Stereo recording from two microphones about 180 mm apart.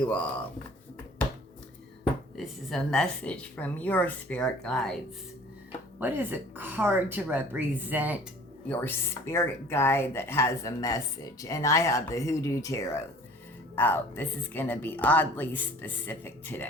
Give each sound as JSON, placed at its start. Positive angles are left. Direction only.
{"t": 2.4, "sound": "speech", "side_deg": 0}
{"t": 6.0, "sound": "a woman's voice", "side_deg": -10}
{"t": 8.7, "sound": "speech", "side_deg": 10}